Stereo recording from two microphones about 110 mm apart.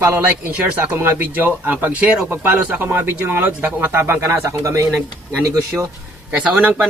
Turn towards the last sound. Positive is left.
turn(degrees=-10)  # may be behind; listen again after turning